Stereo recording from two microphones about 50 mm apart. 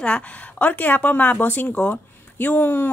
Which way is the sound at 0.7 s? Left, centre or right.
Left.